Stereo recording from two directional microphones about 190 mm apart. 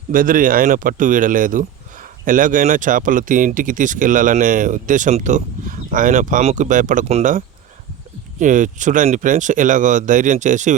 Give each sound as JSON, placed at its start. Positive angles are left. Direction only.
{"t": 0.1, "sound": "speech", "side_deg": -45}